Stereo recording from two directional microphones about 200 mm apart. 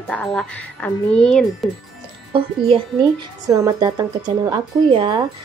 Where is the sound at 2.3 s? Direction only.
25° right (ahead or behind).